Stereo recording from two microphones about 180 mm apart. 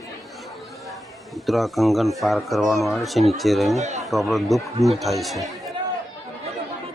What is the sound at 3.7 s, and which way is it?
Speech, 40° right (ahead or behind).